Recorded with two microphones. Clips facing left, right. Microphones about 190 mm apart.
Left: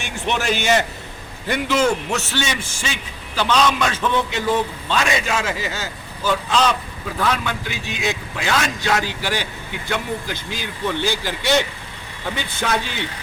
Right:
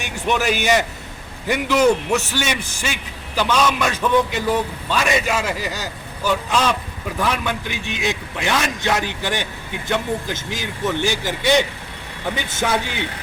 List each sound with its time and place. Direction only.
0.3 s a man's voice: 10° right (ahead or behind)